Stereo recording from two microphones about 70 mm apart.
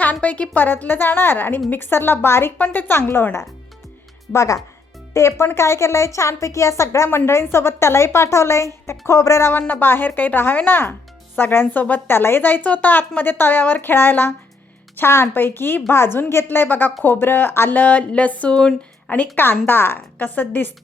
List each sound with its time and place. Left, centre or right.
0.0 s a woman's voice: left
2.6 s a woman's voice: left
4.3 s speech: left
5.1 s a woman's voice: left
9.6 s a woman's voice: left
19.1 s a woman's voice: left
20.2 s a woman's voice: left